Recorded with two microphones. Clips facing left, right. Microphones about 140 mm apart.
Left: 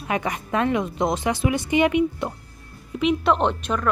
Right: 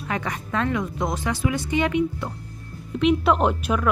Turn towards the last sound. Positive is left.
turn(degrees=-5)  # may be behind; listen again after turning